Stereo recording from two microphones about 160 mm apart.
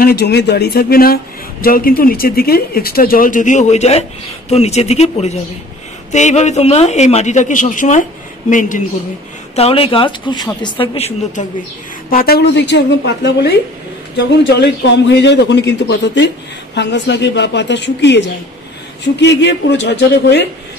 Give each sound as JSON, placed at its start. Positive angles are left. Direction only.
{"t": 0.0, "sound": "speech", "side_deg": 90}
{"t": 9.6, "sound": "speech", "side_deg": 35}
{"t": 12.1, "sound": "a man's voice", "side_deg": 70}